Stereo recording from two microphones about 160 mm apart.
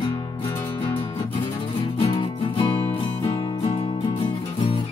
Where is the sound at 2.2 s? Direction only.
30° left (ahead or behind).